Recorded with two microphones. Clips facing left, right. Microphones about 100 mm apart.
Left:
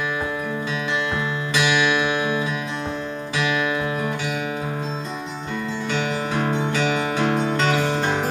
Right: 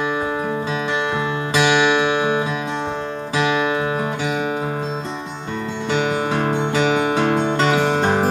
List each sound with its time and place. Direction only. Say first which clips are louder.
1.5 s music: right 4 dB; 30° right (ahead or behind)
7.7 s music: right 4 dB; 40° right (ahead or behind)